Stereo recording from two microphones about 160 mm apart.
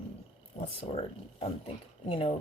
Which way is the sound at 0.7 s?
35° left (ahead or behind).